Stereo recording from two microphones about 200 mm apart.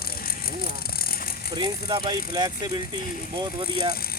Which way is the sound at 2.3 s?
20° right (ahead or behind).